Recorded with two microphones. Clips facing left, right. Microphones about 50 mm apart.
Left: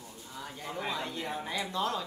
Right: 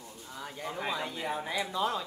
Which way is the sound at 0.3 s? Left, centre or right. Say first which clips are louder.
Right 2 dB; centre.